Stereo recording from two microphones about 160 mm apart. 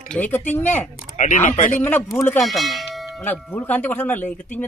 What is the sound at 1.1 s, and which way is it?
Speech, 50° left (ahead or behind).